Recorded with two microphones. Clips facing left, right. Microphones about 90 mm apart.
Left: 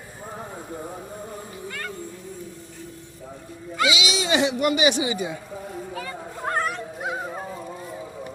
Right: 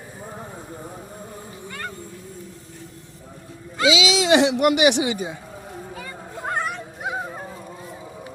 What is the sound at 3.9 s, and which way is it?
Speech, 90° right.